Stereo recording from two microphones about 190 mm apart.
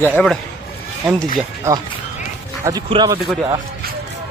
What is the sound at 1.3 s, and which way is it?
Speech, 20° right (ahead or behind).